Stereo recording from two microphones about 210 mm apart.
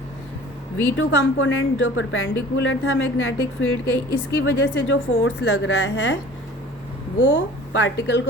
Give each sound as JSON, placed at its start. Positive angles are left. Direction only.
{"t": 0.9, "sound": "a woman's voice", "side_deg": 60}
{"t": 7.2, "sound": "a woman's voice", "side_deg": 55}